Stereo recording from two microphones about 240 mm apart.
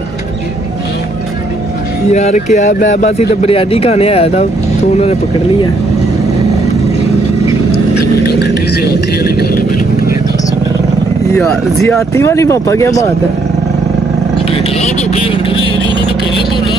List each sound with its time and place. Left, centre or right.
2.0 s speech: left
8.3 s vehicle: left
11.3 s speech: centre
14.5 s vehicle: left